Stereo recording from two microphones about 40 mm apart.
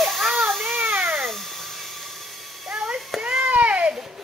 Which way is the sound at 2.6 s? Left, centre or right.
Centre.